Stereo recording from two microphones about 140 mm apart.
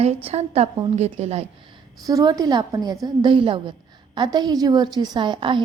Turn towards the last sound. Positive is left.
turn(degrees=-35)  # may be behind; listen again after turning